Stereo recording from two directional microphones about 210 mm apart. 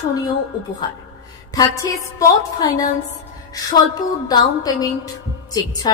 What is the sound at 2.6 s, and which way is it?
A woman's voice, 15° left (ahead or behind).